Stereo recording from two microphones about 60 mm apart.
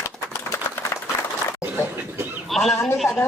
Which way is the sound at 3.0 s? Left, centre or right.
Left.